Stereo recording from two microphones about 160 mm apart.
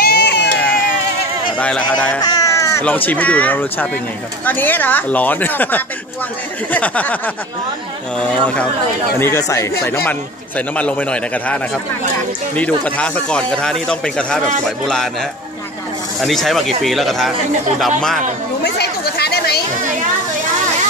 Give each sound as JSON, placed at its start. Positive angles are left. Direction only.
{"t": 0.0, "sound": "baby cry", "side_deg": 90}
{"t": 1.6, "sound": "speech", "side_deg": 10}
{"t": 2.2, "sound": "cat", "side_deg": 20}
{"t": 3.1, "sound": "speech", "side_deg": 10}
{"t": 8.2, "sound": "speech", "side_deg": 5}
{"t": 9.2, "sound": "speech", "side_deg": 20}
{"t": 16.2, "sound": "speech", "side_deg": 0}
{"t": 18.8, "sound": "chatter", "side_deg": 90}